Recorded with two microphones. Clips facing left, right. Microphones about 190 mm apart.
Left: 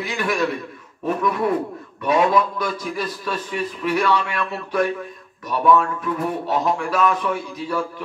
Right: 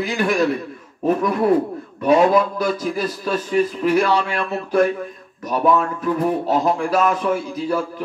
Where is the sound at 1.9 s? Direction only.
40° right (ahead or behind).